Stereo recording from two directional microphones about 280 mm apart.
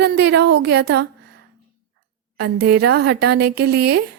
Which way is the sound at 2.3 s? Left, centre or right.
Right.